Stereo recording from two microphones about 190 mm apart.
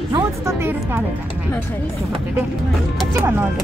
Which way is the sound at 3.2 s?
10° right (ahead or behind).